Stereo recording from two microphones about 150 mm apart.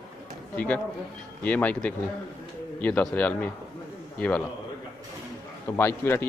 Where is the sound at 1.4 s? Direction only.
10° left (ahead or behind).